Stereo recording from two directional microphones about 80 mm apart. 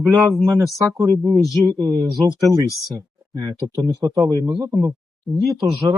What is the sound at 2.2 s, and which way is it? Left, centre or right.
Speech, right.